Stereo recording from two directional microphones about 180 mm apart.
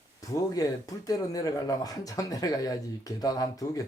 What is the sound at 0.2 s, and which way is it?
A man's voice, 20° left (ahead or behind).